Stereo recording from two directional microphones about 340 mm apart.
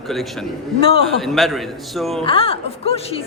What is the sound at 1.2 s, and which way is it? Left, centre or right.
A man's voice, centre.